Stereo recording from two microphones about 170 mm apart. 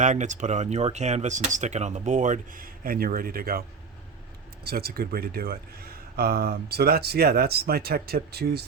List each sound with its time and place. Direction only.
0.0 s speech: 45° right (ahead or behind)
4.6 s speech: 65° right (ahead or behind)